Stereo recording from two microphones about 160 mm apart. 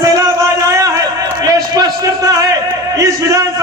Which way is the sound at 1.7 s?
20° right (ahead or behind).